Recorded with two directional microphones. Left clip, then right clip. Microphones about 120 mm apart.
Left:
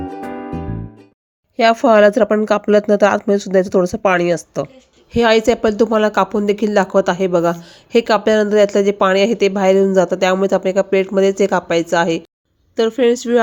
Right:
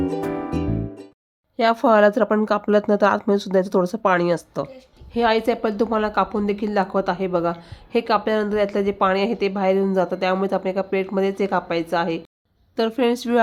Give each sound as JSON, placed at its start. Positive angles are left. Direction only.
{"t": 0.0, "sound": "music", "side_deg": -10}
{"t": 1.5, "sound": "a woman's voice", "side_deg": 25}
{"t": 5.1, "sound": "speech", "side_deg": 40}
{"t": 12.7, "sound": "speech", "side_deg": 15}